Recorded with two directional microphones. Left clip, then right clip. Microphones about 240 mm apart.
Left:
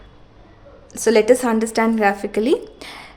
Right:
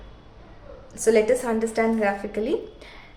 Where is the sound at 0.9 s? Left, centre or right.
Left.